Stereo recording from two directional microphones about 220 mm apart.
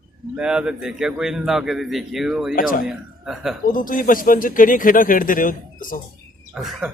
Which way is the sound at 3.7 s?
40° left (ahead or behind).